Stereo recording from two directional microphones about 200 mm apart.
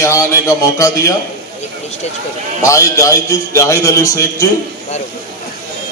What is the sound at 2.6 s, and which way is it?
A man's voice, 15° left (ahead or behind).